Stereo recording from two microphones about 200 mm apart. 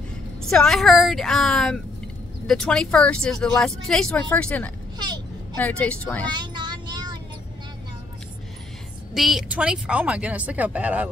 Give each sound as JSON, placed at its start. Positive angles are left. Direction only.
{"t": 0.5, "sound": "speech", "side_deg": 5}
{"t": 4.9, "sound": "a sound", "side_deg": -20}
{"t": 5.6, "sound": "speech", "side_deg": 5}
{"t": 6.3, "sound": "child singing", "side_deg": -20}
{"t": 9.1, "sound": "speech", "side_deg": 0}